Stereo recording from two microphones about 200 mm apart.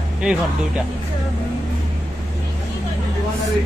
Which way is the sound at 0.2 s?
5° right (ahead or behind).